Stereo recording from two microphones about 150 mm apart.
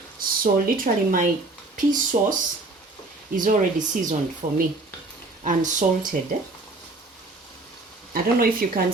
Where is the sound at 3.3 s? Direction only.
60° right (ahead or behind).